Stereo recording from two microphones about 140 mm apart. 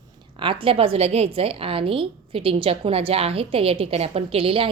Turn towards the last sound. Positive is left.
turn(degrees=-40)  # may be behind; listen again after turning